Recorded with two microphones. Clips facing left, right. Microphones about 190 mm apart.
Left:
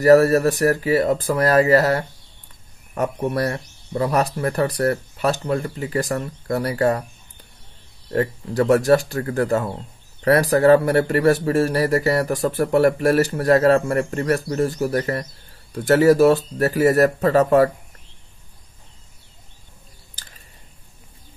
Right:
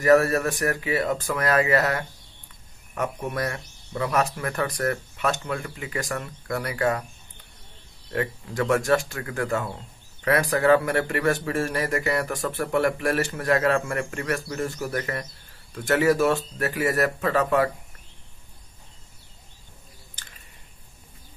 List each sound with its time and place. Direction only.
0.0 s speech: 35° left (ahead or behind)
8.1 s speech: 35° left (ahead or behind)